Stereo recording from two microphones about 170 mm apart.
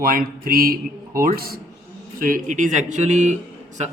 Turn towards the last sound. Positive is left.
turn(degrees=-45)  # may be behind; listen again after turning